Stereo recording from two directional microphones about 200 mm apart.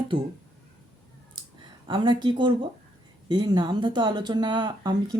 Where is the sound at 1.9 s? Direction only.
25° right (ahead or behind).